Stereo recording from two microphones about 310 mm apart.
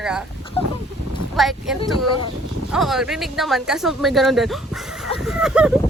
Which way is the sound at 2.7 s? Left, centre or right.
Centre.